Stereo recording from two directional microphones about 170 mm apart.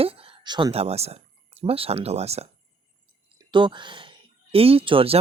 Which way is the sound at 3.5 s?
30° right (ahead or behind).